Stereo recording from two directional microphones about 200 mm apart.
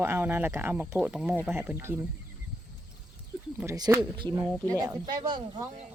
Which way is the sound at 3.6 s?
15° right (ahead or behind).